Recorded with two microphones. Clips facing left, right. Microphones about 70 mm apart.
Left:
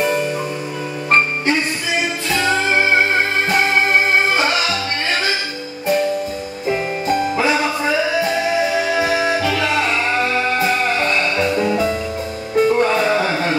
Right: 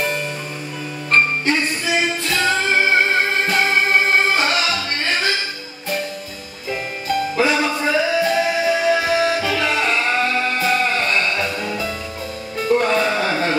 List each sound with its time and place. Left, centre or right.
2.3 s music: centre
4.4 s music: centre
7.3 s music: centre
11.5 s music: left; by 13.6 s centre